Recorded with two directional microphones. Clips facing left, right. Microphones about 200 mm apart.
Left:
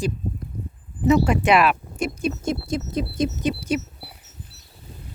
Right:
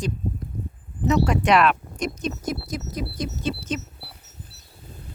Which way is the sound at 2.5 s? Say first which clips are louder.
Left 4 dB; 25° left (ahead or behind).